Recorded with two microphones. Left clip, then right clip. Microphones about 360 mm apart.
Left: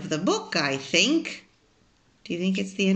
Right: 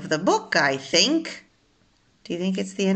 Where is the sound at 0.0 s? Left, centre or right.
Right.